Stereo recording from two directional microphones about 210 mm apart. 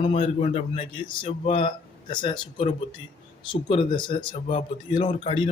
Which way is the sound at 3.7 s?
25° left (ahead or behind).